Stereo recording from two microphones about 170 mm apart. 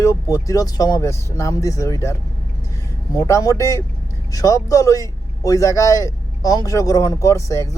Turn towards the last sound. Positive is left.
turn(degrees=20)  # may be behind; listen again after turning